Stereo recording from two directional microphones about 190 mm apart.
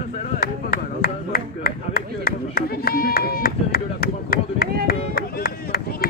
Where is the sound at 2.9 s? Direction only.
50° left (ahead or behind).